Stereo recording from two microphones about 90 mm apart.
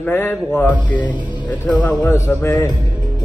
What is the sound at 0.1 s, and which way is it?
Speech, 25° left (ahead or behind).